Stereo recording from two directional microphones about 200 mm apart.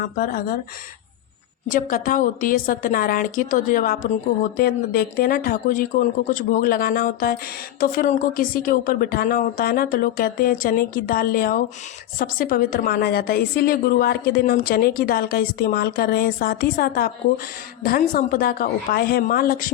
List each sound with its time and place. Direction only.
0.0 s a woman's voice: 45° left (ahead or behind)
1.7 s a woman's voice: 45° left (ahead or behind)